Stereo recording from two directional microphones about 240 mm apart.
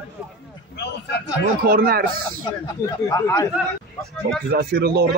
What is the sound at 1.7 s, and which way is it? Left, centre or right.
Speech, right.